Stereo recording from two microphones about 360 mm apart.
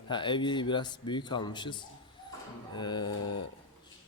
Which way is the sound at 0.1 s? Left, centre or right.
Centre.